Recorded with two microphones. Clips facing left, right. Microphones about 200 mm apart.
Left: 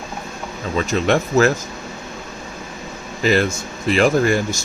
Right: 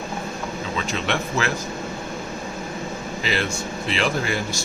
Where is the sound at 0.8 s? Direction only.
45° left (ahead or behind).